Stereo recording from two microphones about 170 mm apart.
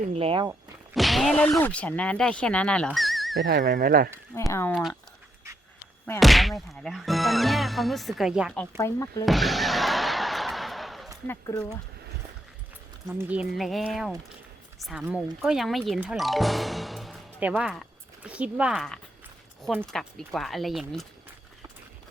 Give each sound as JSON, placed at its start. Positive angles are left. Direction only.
{"t": 0.1, "sound": "speech", "side_deg": -35}
{"t": 0.9, "sound": "speech", "side_deg": 0}
{"t": 3.6, "sound": "speech", "side_deg": -55}
{"t": 4.4, "sound": "speech", "side_deg": 15}
{"t": 4.7, "sound": "speech", "side_deg": 0}
{"t": 6.1, "sound": "speech", "side_deg": 0}
{"t": 8.8, "sound": "speech", "side_deg": 20}
{"t": 9.2, "sound": "music", "side_deg": 0}
{"t": 11.3, "sound": "speech", "side_deg": 20}
{"t": 13.1, "sound": "a woman's voice", "side_deg": -10}